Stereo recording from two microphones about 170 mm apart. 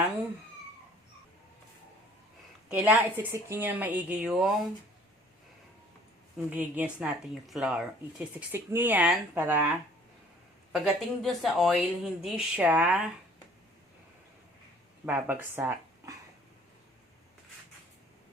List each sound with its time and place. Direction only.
2.7 s a woman's voice: 10° right (ahead or behind)
6.5 s a woman's voice: 10° right (ahead or behind)
10.7 s a woman's voice: centre (ahead or behind)
15.0 s speech: 10° right (ahead or behind)